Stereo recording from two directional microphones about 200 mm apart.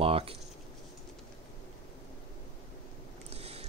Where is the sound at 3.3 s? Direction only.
30° right (ahead or behind).